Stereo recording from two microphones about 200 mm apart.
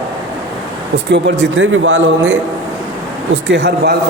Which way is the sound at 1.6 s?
75° right (ahead or behind).